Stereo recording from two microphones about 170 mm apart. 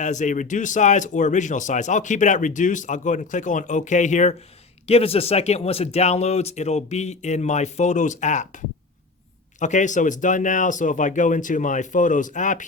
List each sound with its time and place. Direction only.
0.0 s a man's voice: 45° left (ahead or behind)